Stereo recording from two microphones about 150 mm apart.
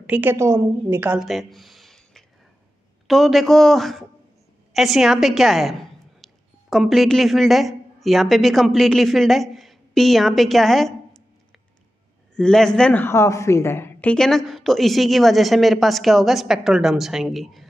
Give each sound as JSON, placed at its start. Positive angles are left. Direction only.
{"t": 0.0, "sound": "a woman's voice", "side_deg": -10}
{"t": 1.2, "sound": "a sound", "side_deg": 0}
{"t": 3.1, "sound": "a woman's voice", "side_deg": 0}
{"t": 12.4, "sound": "a woman's voice", "side_deg": 5}
{"t": 14.1, "sound": "a woman's voice", "side_deg": 5}